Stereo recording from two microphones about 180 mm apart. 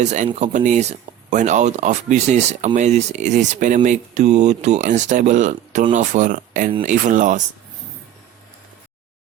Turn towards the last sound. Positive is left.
turn(degrees=-45)  # may be behind; listen again after turning